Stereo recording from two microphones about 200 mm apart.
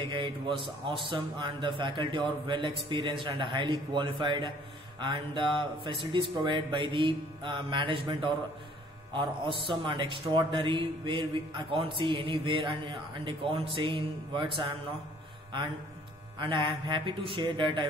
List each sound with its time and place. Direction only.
0.0 s a man's voice: 25° right (ahead or behind)
16.3 s a man's voice: 25° right (ahead or behind)